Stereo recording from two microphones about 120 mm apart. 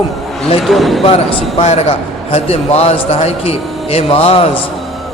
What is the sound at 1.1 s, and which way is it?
A man's voice, 55° left (ahead or behind).